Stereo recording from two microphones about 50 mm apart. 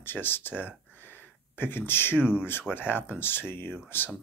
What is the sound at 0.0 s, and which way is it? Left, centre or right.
Speech, left.